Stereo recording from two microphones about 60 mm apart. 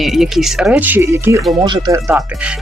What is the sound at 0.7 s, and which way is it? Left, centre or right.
Speech, right.